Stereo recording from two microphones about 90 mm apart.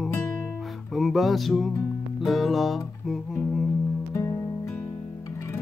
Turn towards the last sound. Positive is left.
turn(degrees=35)  # may be behind; listen again after turning